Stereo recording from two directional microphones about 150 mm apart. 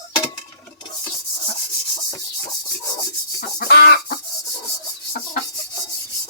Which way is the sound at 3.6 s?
90° left.